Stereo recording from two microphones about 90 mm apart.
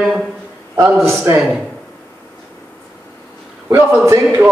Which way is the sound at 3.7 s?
25° right (ahead or behind).